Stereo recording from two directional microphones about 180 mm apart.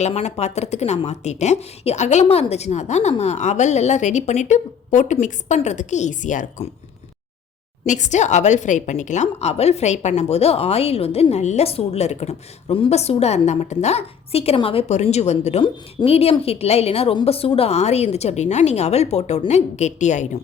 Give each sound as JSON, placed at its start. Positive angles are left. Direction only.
{"t": 0.0, "sound": "a woman's voice", "side_deg": 35}
{"t": 7.9, "sound": "a woman's voice", "side_deg": 40}